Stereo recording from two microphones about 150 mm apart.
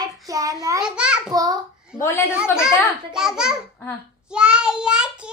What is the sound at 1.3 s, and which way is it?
Speech, 25° right (ahead or behind).